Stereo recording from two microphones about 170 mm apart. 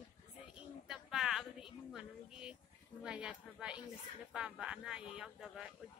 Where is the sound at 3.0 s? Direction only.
5° right (ahead or behind).